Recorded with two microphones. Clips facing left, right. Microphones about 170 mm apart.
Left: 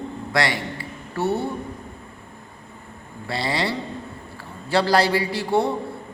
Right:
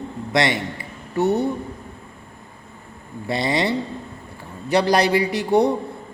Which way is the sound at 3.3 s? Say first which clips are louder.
Right 4 dB; 20° right (ahead or behind).